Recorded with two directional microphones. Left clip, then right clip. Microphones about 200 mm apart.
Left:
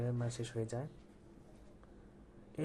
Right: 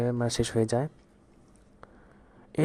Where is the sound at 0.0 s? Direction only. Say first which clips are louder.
Right 14 dB; 45° right (ahead or behind).